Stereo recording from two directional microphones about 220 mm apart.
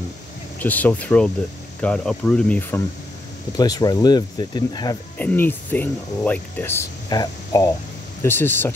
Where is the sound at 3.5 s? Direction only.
15° left (ahead or behind).